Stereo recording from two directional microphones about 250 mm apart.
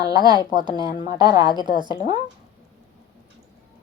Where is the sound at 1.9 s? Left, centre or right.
Centre.